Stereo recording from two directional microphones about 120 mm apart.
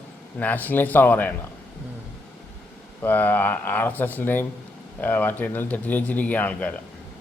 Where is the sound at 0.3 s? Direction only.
15° left (ahead or behind).